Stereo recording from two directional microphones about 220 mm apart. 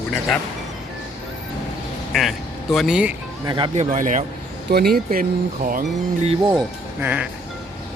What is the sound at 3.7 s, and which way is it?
Speech, 35° right (ahead or behind).